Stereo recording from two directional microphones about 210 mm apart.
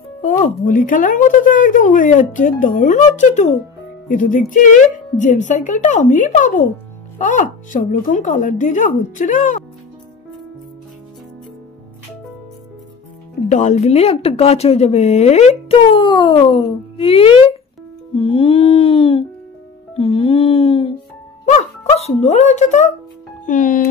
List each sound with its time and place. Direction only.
0.2 s a woman's voice: 40° left (ahead or behind)
13.5 s speech: 35° left (ahead or behind)